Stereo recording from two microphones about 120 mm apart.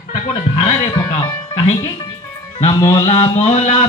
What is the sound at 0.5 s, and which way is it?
Music, 70° left (ahead or behind).